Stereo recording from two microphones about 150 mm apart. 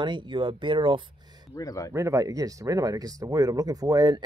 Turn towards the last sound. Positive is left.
turn(degrees=-25)  # may be behind; listen again after turning